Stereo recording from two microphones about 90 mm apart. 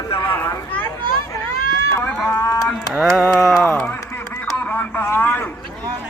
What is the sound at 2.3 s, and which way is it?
Livestock, 30° left (ahead or behind).